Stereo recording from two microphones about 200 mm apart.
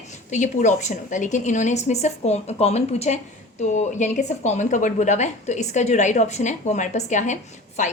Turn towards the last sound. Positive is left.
turn(degrees=35)  # may be behind; listen again after turning